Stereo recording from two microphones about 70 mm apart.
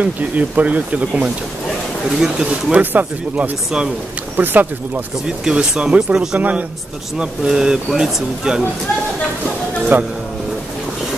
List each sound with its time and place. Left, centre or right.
0.0 s speech: right
5.4 s speech: centre
9.9 s speech: right